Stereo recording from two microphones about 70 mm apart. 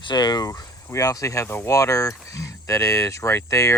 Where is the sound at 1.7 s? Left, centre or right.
Left.